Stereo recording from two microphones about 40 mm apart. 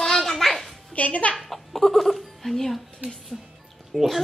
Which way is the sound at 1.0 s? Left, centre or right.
Left.